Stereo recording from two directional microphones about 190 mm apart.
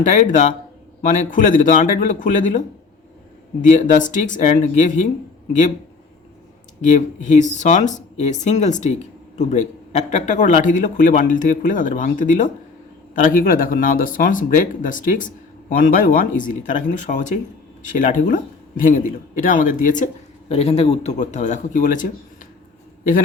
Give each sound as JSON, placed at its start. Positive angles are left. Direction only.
{"t": 0.0, "sound": "speech", "side_deg": 40}
{"t": 6.8, "sound": "speech", "side_deg": 40}
{"t": 20.5, "sound": "speech", "side_deg": 30}